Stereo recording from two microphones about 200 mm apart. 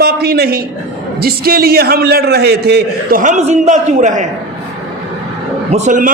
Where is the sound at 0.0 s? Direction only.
50° right (ahead or behind).